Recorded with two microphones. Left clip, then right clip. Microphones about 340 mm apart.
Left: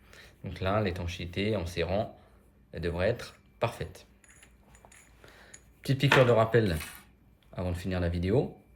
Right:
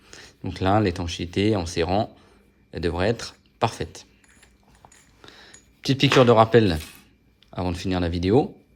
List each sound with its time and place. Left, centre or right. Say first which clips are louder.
0.0 s speech: right 10 dB; centre
5.2 s a sound: right 8 dB; centre
7.5 s speech: right 8 dB; centre